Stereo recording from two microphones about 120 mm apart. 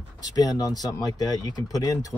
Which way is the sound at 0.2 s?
30° left (ahead or behind).